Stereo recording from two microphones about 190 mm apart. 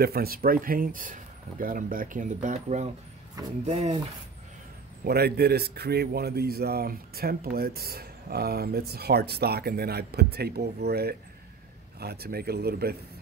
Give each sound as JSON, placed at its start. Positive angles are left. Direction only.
{"t": 0.0, "sound": "speech", "side_deg": -55}
{"t": 5.0, "sound": "a man's voice", "side_deg": -55}